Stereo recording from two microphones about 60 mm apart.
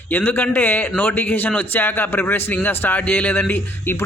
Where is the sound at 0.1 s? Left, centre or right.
Left.